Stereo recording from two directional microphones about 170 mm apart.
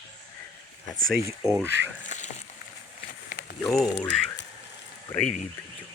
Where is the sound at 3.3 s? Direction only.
45° left (ahead or behind).